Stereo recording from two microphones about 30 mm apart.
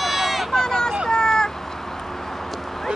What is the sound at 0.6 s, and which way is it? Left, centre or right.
Speech, left.